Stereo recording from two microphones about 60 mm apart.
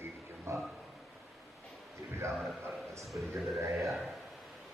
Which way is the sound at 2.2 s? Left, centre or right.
Right.